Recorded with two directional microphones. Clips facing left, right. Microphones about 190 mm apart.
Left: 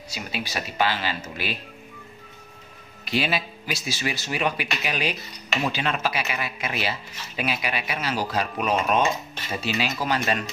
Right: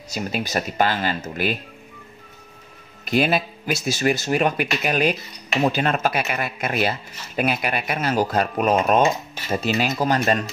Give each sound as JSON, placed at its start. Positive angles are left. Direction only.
{"t": 0.1, "sound": "speech", "side_deg": -45}
{"t": 3.1, "sound": "speech", "side_deg": -50}